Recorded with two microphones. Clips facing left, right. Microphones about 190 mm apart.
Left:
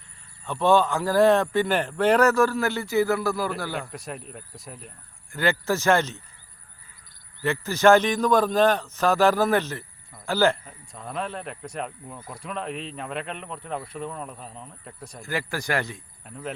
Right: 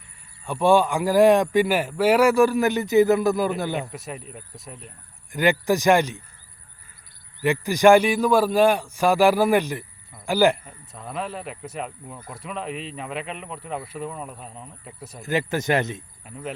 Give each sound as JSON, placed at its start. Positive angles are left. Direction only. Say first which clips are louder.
{"t": 0.4, "sound": "a man's voice", "louder": "right 2 dB", "side_deg": -10}
{"t": 3.9, "sound": "speech", "louder": "right 1 dB", "side_deg": 0}
{"t": 5.3, "sound": "a man's voice", "louder": "right 4 dB", "side_deg": -15}
{"t": 7.4, "sound": "a man's voice", "louder": "right 3 dB", "side_deg": -15}
{"t": 10.9, "sound": "speech", "louder": "right 1 dB", "side_deg": 0}
{"t": 15.2, "sound": "speech", "louder": "right 6 dB", "side_deg": -20}
{"t": 16.2, "sound": "speech", "louder": "even", "side_deg": -5}